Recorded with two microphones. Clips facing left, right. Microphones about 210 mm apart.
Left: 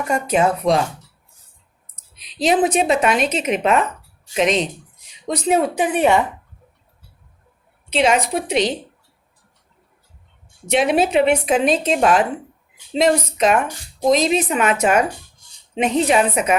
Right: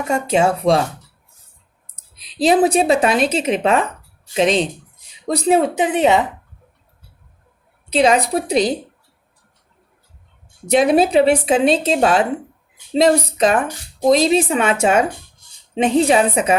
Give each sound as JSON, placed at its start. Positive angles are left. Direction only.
{"t": 0.0, "sound": "speech", "side_deg": -25}
{"t": 2.1, "sound": "speech", "side_deg": -35}
{"t": 7.9, "sound": "speech", "side_deg": -35}
{"t": 10.7, "sound": "speech", "side_deg": -35}